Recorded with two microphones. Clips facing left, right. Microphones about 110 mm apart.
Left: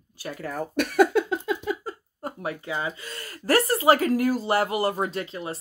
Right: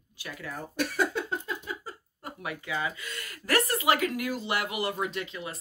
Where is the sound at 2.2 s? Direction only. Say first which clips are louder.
Left 6 dB; 35° left (ahead or behind).